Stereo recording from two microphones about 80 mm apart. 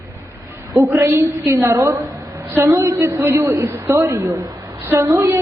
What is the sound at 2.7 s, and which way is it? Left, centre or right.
A woman's voice, right.